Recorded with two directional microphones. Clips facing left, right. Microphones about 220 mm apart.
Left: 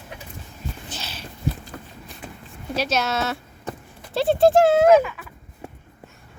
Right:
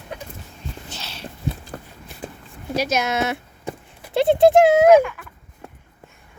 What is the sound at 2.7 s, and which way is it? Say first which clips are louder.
Speech: right 2 dB; 10° right (ahead or behind).